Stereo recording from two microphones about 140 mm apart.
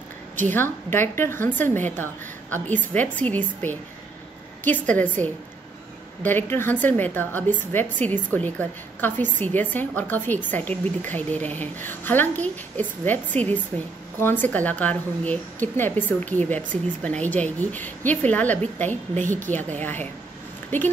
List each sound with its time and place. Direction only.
0.5 s a woman's voice: 15° left (ahead or behind)